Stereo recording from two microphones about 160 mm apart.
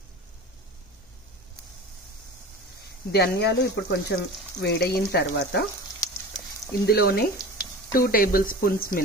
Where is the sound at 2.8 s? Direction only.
90° left.